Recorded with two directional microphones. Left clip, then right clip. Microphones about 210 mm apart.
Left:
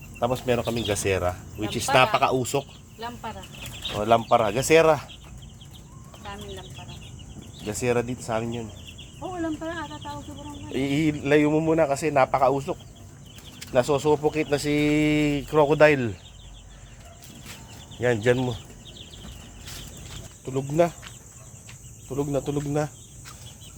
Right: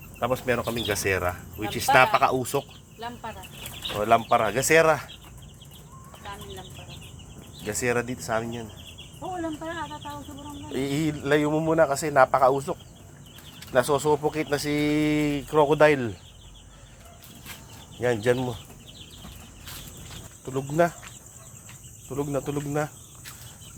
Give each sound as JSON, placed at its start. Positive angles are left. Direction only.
{"t": 0.2, "sound": "speech", "side_deg": 5}
{"t": 3.0, "sound": "speech", "side_deg": 45}
{"t": 3.9, "sound": "speech", "side_deg": 10}
{"t": 7.6, "sound": "speech", "side_deg": 5}
{"t": 9.4, "sound": "speech", "side_deg": 35}
{"t": 10.8, "sound": "speech", "side_deg": 10}
{"t": 13.7, "sound": "speech", "side_deg": 5}
{"t": 18.0, "sound": "speech", "side_deg": 15}
{"t": 20.4, "sound": "speech", "side_deg": 5}
{"t": 22.1, "sound": "speech", "side_deg": 0}